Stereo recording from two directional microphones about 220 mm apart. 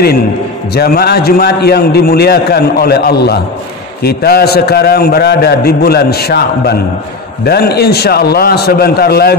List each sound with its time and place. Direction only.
0.7 s a man's voice: 45° left (ahead or behind)